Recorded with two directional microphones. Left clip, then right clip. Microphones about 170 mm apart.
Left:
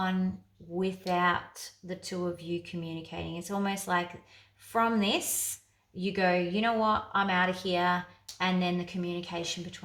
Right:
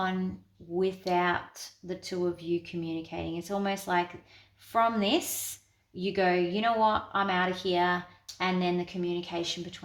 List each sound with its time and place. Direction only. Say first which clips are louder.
0.8 s speech: right 1 dB; 30° right (ahead or behind)